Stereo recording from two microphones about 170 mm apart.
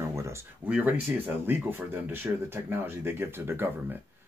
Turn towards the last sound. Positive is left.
turn(degrees=-10)  # may be behind; listen again after turning